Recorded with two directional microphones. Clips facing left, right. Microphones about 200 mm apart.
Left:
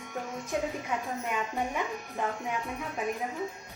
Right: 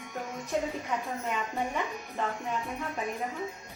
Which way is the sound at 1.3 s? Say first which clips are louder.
Even; 10° left (ahead or behind).